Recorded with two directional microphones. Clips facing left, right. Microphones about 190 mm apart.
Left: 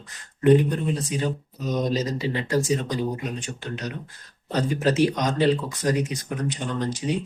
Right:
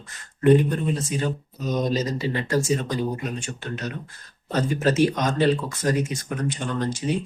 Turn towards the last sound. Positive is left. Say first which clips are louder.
# right 1 dB
turn(degrees=15)  # may be behind; listen again after turning